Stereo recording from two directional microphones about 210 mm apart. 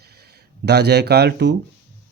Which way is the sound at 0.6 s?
50° right (ahead or behind).